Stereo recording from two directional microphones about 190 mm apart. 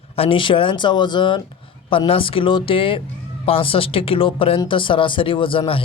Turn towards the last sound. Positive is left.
turn(degrees=25)  # may be behind; listen again after turning